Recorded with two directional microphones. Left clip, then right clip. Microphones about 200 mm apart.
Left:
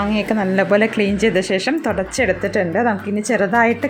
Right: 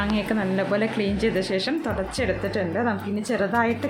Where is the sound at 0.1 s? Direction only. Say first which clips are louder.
Left 6 dB; 30° left (ahead or behind).